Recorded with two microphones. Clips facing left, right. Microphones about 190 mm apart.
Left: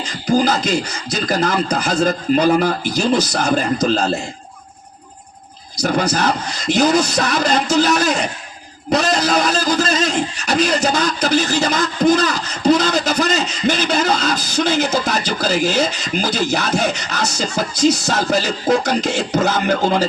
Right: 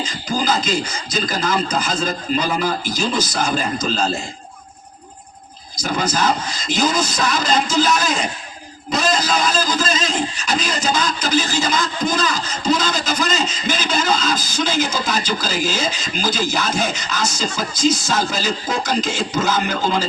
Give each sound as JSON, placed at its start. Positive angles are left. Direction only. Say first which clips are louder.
{"t": 0.0, "sound": "speech", "louder": "left 6 dB", "side_deg": 65}
{"t": 5.7, "sound": "speech", "louder": "left 4 dB", "side_deg": 65}